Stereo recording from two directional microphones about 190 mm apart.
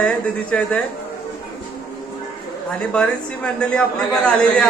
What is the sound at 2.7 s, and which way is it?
Speech, 5° left (ahead or behind).